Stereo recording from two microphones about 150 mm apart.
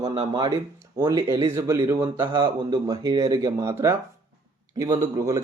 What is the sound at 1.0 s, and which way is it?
Speech, 20° right (ahead or behind).